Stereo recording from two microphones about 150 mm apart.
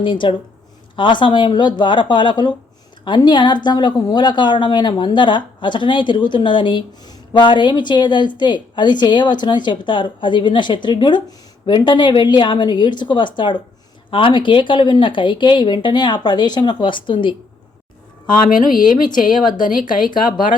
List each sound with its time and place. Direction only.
0.0 s speech: 30° left (ahead or behind)
18.3 s a woman's voice: 65° left (ahead or behind)
20.0 s speech: 65° left (ahead or behind)